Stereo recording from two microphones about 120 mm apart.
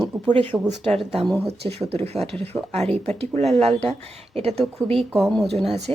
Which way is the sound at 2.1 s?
60° right (ahead or behind).